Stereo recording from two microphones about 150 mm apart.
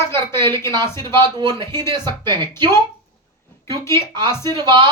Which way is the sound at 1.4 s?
30° right (ahead or behind).